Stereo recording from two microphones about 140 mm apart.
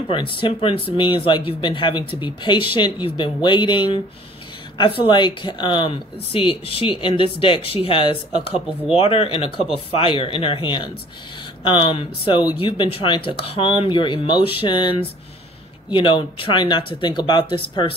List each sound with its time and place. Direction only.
0.1 s speech: 35° left (ahead or behind)